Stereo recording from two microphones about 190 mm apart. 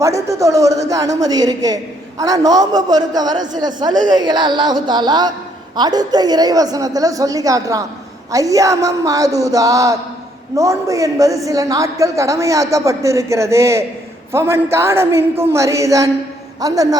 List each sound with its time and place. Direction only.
0.0 s a man's voice: 15° right (ahead or behind)